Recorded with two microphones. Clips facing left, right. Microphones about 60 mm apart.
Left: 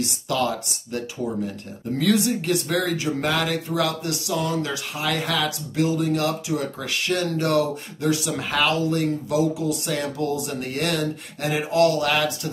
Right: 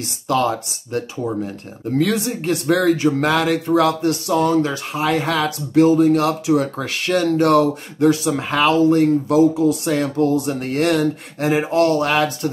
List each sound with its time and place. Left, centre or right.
0.0 s speech: right
2.0 s speech: right
8.3 s speech: right